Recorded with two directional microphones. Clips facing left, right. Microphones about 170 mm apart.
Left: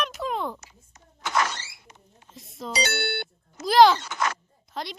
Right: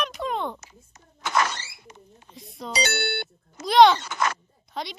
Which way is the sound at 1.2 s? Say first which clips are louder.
Right 1 dB; 65° right (ahead or behind).